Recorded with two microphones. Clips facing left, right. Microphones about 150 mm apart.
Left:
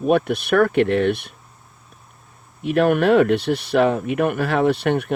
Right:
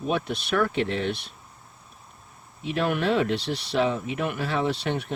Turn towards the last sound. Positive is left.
turn(degrees=60)  # may be behind; listen again after turning